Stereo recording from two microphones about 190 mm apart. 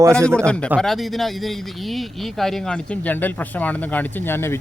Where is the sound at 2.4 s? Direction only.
5° left (ahead or behind).